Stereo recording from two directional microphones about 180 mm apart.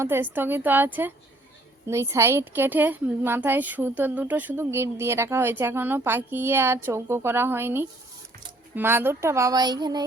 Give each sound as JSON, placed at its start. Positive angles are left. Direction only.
{"t": 0.0, "sound": "a woman's voice", "side_deg": -10}